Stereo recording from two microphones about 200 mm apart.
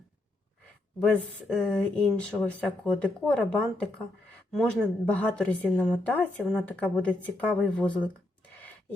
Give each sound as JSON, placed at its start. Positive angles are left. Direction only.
{"t": 1.0, "sound": "speech", "side_deg": 5}